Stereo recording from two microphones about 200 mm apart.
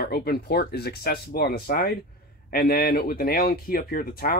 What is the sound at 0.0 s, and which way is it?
Speech, 50° left (ahead or behind).